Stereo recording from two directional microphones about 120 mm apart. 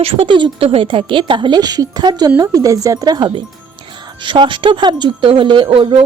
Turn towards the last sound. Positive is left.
turn(degrees=-50)  # may be behind; listen again after turning